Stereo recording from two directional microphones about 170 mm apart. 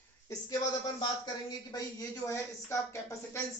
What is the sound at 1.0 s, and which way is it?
Speech, 25° left (ahead or behind).